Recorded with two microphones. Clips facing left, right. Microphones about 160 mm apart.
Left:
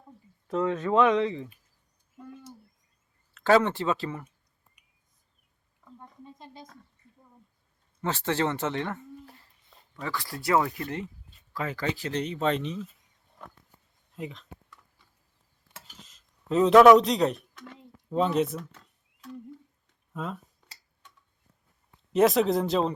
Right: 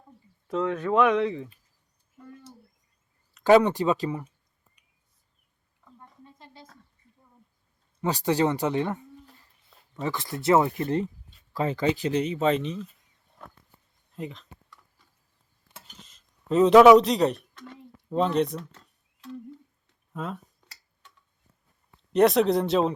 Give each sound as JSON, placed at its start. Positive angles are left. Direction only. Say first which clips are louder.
{"t": 0.4, "sound": "speech", "louder": "even", "side_deg": 0}
{"t": 3.3, "sound": "speech", "louder": "right 4 dB", "side_deg": -15}
{"t": 6.0, "sound": "a sound", "louder": "left 3 dB", "side_deg": 15}
{"t": 8.0, "sound": "speech", "louder": "right 4 dB", "side_deg": -15}
{"t": 12.1, "sound": "speech", "louder": "right 4 dB", "side_deg": -5}
{"t": 14.2, "sound": "speech", "louder": "right 1 dB", "side_deg": 0}
{"t": 15.7, "sound": "a sound", "louder": "even", "side_deg": 0}
{"t": 18.1, "sound": "speech", "louder": "right 1 dB", "side_deg": 0}
{"t": 20.1, "sound": "speech", "louder": "right 1 dB", "side_deg": 0}
{"t": 22.1, "sound": "speech", "louder": "right 2 dB", "side_deg": 0}